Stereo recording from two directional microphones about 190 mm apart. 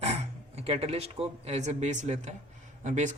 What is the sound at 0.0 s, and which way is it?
Speech, 35° right (ahead or behind).